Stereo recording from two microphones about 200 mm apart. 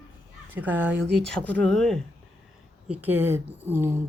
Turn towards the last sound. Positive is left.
turn(degrees=-10)  # may be behind; listen again after turning